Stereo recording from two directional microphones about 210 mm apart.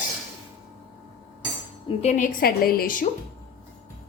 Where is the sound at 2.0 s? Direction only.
35° left (ahead or behind).